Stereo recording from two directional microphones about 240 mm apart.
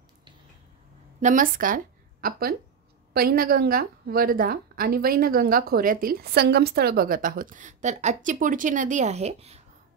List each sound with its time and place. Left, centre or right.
1.2 s a woman's voice: right
3.1 s a woman's voice: right